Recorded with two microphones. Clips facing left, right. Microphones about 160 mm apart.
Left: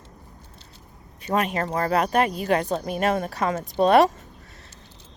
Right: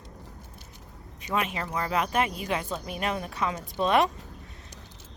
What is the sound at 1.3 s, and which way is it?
Speech, 45° left (ahead or behind).